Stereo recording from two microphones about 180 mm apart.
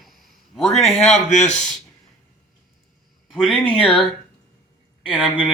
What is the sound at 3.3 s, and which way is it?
Speech, centre (ahead or behind).